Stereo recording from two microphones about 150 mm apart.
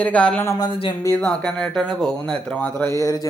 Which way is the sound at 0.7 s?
35° left (ahead or behind).